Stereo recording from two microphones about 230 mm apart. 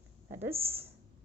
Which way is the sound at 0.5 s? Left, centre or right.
Right.